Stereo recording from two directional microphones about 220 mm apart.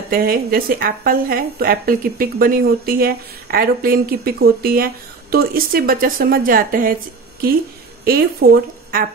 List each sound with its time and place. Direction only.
0.1 s speech: 40° right (ahead or behind)
8.0 s speech: 40° right (ahead or behind)